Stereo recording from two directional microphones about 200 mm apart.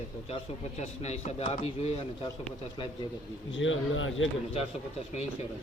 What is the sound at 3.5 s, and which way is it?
Speech, 75° left (ahead or behind).